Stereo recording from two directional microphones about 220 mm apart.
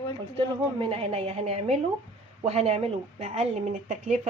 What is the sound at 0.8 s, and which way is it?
A woman's voice, 25° right (ahead or behind).